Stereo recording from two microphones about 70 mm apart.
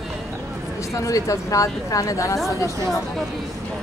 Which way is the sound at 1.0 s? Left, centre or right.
Left.